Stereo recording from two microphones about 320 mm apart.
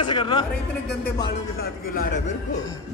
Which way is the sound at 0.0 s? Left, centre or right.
Centre.